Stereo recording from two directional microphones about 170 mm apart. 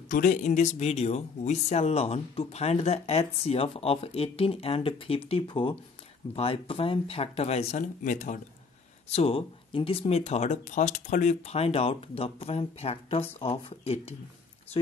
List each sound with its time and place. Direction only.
0.1 s speech: 50° left (ahead or behind)
9.1 s speech: 35° left (ahead or behind)